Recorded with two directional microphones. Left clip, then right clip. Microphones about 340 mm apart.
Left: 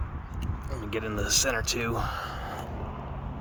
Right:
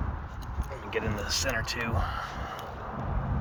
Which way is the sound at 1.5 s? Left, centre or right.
Left.